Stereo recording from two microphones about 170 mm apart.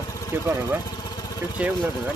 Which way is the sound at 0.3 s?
15° right (ahead or behind).